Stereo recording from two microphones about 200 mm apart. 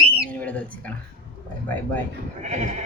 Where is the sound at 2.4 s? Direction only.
35° right (ahead or behind).